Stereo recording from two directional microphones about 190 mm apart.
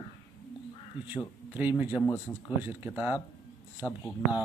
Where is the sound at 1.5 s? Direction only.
10° right (ahead or behind).